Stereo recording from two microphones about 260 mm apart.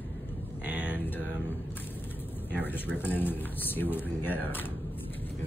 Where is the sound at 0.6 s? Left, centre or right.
Centre.